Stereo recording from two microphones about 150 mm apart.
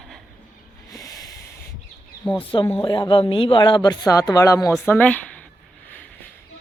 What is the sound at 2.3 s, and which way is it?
Speech, 35° left (ahead or behind).